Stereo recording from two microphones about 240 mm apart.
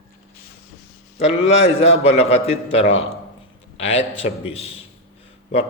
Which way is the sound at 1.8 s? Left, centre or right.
Left.